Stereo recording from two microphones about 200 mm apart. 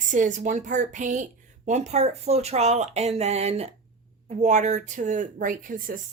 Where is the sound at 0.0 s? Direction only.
40° right (ahead or behind).